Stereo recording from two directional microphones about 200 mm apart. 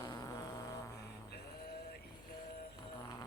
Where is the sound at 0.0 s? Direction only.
20° left (ahead or behind).